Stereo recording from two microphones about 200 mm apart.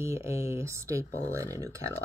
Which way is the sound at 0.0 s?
15° right (ahead or behind).